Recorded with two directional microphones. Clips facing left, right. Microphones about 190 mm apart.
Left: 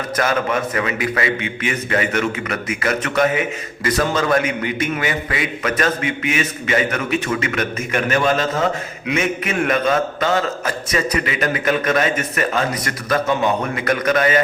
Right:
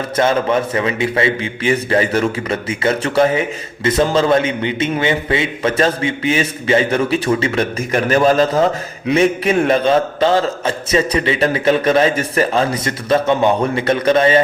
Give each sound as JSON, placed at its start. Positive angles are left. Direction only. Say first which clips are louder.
{"t": 0.2, "sound": "a man's voice", "louder": "right 5 dB", "side_deg": -25}